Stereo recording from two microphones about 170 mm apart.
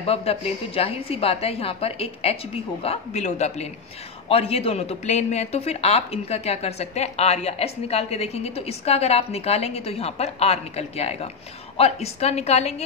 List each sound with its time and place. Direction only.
0.0 s speech: 35° left (ahead or behind)